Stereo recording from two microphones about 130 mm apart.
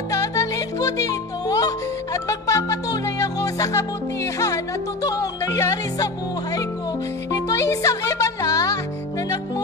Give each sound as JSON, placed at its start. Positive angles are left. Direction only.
{"t": 0.1, "sound": "music", "side_deg": 25}
{"t": 7.2, "sound": "music", "side_deg": 25}